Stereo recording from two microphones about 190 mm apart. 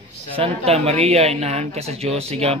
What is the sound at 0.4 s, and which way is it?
Speech, 35° right (ahead or behind).